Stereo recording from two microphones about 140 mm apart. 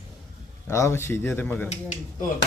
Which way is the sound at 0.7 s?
20° left (ahead or behind).